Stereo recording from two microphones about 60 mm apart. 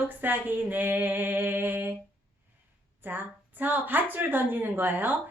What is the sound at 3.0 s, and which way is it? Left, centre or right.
A woman's voice, right.